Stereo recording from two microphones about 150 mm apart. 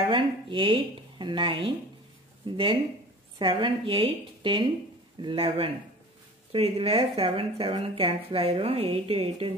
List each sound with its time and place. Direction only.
0.0 s speech: 35° right (ahead or behind)